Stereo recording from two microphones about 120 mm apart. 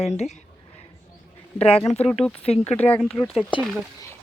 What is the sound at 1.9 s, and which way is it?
Speech, 55° left (ahead or behind).